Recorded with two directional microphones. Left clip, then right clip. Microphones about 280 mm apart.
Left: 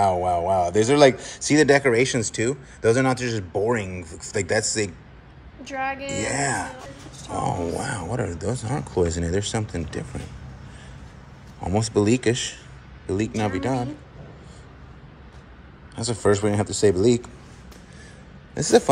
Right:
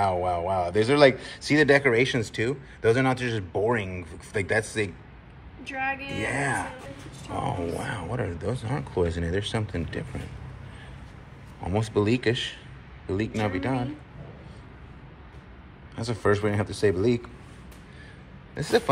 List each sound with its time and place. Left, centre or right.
0.0 s speech: centre
11.6 s speech: centre
16.0 s speech: centre
18.5 s a man's voice: left